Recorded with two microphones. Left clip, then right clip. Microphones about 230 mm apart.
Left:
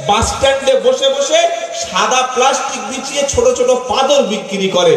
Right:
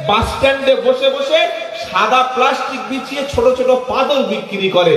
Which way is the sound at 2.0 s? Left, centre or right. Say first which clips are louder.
Even; left.